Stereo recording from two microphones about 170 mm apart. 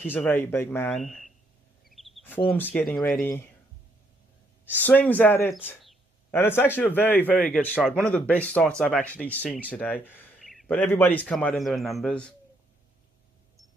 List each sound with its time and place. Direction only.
0.0 s speech: 10° left (ahead or behind)
0.9 s speech: centre (ahead or behind)
1.9 s a sound: centre (ahead or behind)
2.4 s speech: 10° left (ahead or behind)
4.6 s speech: 10° left (ahead or behind)
10.4 s a sound: centre (ahead or behind)
10.7 s a man's voice: 10° left (ahead or behind)